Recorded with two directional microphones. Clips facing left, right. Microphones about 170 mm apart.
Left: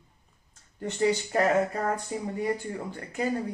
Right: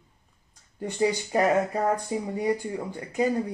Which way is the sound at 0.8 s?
15° right (ahead or behind).